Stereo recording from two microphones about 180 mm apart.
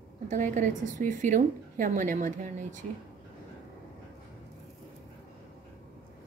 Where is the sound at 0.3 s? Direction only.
45° right (ahead or behind).